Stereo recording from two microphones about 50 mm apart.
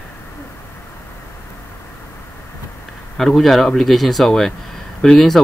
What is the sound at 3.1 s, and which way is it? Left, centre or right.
Speech, centre.